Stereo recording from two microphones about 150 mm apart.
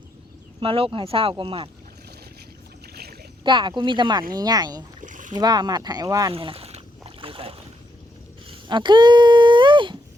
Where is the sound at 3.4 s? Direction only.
30° right (ahead or behind).